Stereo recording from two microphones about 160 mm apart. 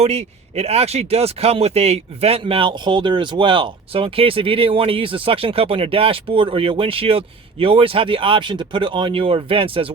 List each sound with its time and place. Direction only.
0.0 s speech: 40° right (ahead or behind)